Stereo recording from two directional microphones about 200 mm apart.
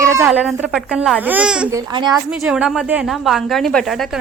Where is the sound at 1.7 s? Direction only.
25° right (ahead or behind).